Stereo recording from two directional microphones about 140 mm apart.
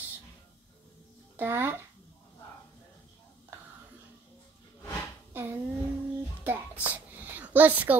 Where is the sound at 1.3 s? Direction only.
15° right (ahead or behind).